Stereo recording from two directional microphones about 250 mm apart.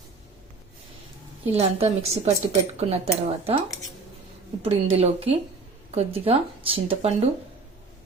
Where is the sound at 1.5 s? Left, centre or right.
Right.